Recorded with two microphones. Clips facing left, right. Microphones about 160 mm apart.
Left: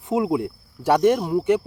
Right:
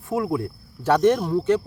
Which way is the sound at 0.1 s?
20° left (ahead or behind).